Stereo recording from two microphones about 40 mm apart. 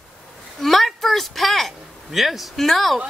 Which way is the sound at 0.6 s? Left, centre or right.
Centre.